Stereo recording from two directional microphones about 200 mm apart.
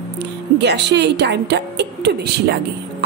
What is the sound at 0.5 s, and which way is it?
A woman's voice, 60° right (ahead or behind).